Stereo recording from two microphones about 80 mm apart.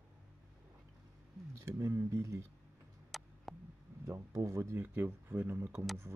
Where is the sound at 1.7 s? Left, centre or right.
Right.